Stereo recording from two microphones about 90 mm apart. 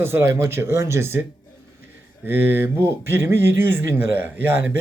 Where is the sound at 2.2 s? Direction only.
25° right (ahead or behind).